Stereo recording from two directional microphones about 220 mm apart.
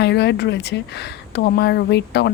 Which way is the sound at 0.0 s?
50° left (ahead or behind).